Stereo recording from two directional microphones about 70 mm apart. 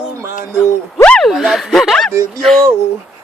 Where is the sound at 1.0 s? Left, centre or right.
Centre.